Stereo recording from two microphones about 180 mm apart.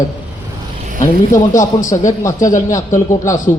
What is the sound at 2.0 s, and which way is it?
Speech, 20° left (ahead or behind).